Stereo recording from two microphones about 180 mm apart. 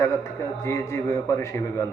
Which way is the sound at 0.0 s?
15° left (ahead or behind).